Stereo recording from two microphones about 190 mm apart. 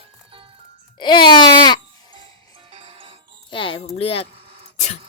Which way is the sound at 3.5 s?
25° left (ahead or behind).